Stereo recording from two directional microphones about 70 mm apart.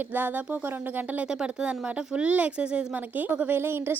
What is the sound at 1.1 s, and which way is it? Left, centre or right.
Speech, centre.